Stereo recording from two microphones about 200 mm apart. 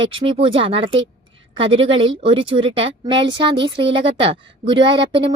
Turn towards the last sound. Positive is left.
turn(degrees=-25)  # may be behind; listen again after turning